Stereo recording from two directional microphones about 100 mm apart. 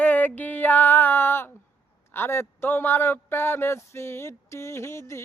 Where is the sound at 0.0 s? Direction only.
15° left (ahead or behind).